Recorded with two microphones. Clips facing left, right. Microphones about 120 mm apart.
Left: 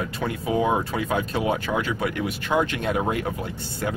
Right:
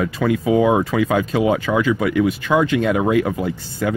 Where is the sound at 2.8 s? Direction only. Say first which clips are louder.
Right 6 dB; 90° right.